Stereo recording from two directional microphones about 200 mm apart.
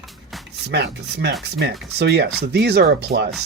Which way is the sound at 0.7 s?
55° right (ahead or behind).